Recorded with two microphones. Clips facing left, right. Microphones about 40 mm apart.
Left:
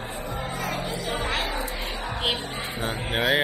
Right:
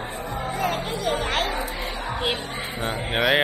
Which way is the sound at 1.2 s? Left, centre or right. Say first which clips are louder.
Right 3 dB; right.